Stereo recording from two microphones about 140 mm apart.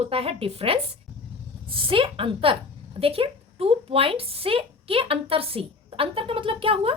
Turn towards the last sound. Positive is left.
turn(degrees=-40)  # may be behind; listen again after turning